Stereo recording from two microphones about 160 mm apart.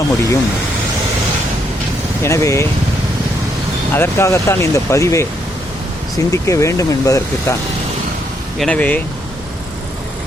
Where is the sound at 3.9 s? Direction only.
15° left (ahead or behind).